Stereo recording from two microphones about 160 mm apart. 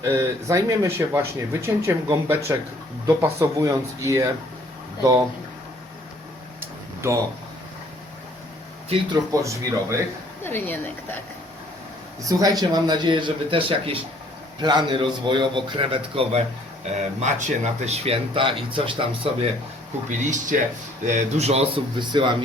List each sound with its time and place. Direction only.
0.0 s speech: 15° right (ahead or behind)
7.0 s speech: 15° right (ahead or behind)
9.3 s speech: 20° right (ahead or behind)
10.4 s a woman's voice: 15° left (ahead or behind)
12.3 s speech: 20° right (ahead or behind)
17.2 s speech: 45° right (ahead or behind)
20.1 s speech: 50° right (ahead or behind)
21.9 s speech: 30° right (ahead or behind)